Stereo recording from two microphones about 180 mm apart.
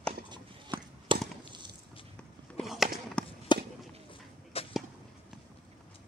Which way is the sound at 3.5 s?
25° left (ahead or behind).